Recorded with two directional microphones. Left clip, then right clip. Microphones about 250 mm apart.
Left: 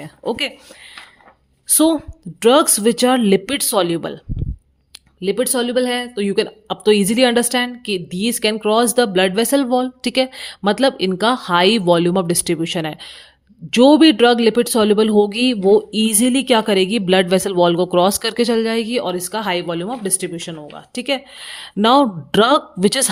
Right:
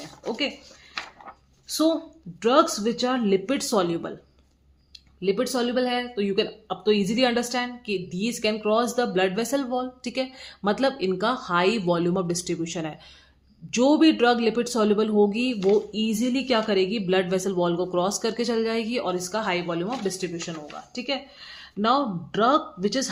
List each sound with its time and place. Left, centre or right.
0.3 s speech: left
1.6 s a woman's voice: left
5.2 s speech: left